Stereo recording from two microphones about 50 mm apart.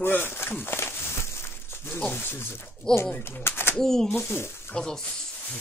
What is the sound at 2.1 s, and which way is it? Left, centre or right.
Speech, left.